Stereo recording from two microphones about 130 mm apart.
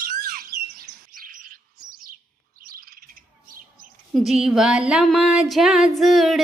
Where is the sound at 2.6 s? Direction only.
90° right.